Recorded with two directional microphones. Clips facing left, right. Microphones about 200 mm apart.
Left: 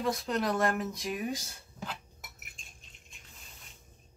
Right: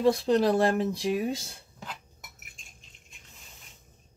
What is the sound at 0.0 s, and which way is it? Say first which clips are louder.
Speech: right 8 dB; 30° right (ahead or behind).